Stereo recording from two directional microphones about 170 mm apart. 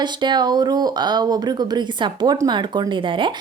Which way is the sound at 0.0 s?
25° right (ahead or behind).